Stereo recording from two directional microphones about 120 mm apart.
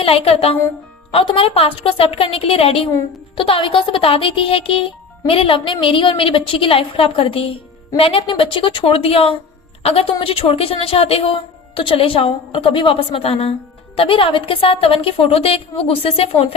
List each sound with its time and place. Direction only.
0.0 s speech: 55° left (ahead or behind)